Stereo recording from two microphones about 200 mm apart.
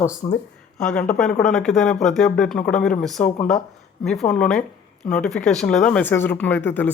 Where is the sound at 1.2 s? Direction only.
5° left (ahead or behind).